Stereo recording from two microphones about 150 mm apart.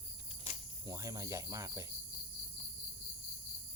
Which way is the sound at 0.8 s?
20° right (ahead or behind).